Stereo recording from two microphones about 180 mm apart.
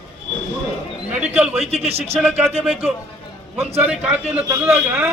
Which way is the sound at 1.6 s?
35° right (ahead or behind).